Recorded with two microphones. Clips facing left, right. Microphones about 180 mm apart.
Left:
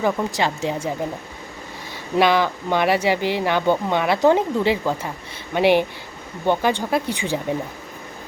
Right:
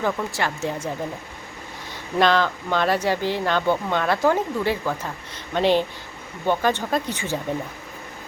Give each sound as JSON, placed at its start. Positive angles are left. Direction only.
{"t": 0.0, "sound": "speech", "side_deg": 15}
{"t": 2.1, "sound": "speech", "side_deg": 10}